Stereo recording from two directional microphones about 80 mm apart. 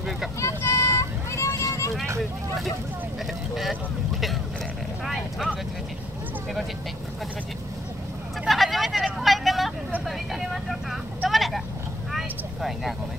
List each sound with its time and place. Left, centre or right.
0.4 s vehicle: left
2.1 s speech: centre
5.0 s speech: centre
8.5 s vehicle: centre